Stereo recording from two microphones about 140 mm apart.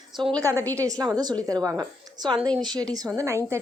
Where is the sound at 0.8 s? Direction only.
25° right (ahead or behind).